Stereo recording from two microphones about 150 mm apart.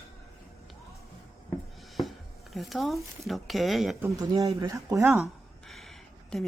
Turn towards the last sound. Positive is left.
turn(degrees=0)  # may be behind; listen again after turning